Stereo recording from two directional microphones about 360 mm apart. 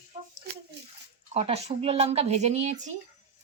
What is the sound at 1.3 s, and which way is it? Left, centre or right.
Speech, centre.